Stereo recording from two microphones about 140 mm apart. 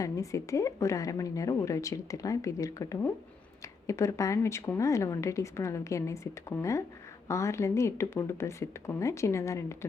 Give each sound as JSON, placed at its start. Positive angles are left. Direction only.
{"t": 0.0, "sound": "a woman's voice", "side_deg": 20}